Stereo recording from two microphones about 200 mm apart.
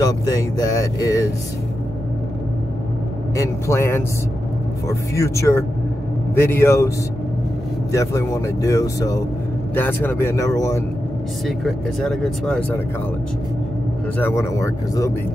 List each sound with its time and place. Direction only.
0.0 s speech: 15° left (ahead or behind)
3.3 s speech: 15° left (ahead or behind)
7.9 s speech: 15° left (ahead or behind)
11.4 s speech: centre (ahead or behind)
14.1 s speech: 10° left (ahead or behind)